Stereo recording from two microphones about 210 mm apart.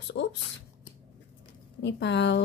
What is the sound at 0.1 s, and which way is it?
Speech, 55° left (ahead or behind).